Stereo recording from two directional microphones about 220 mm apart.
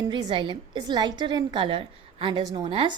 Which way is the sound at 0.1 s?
20° right (ahead or behind).